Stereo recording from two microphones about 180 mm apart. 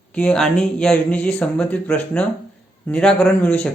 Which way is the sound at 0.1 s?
5° left (ahead or behind).